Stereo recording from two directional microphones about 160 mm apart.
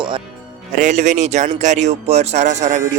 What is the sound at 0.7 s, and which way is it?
Speech, 50° right (ahead or behind).